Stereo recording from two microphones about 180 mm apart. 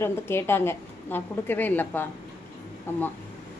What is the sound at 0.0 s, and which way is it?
A woman's voice, 15° left (ahead or behind).